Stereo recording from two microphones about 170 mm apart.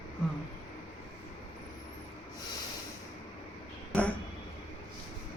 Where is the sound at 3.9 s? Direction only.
10° left (ahead or behind).